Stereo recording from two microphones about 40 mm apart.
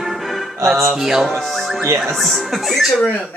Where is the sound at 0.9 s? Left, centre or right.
Centre.